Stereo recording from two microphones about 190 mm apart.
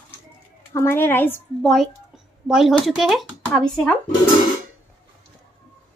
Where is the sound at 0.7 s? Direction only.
10° left (ahead or behind).